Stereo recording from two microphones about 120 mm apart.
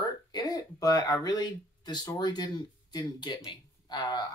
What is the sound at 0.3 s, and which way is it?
Speech, 35° left (ahead or behind).